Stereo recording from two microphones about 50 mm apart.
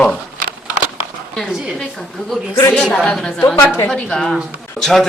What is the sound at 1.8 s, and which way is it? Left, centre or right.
A man's voice, centre.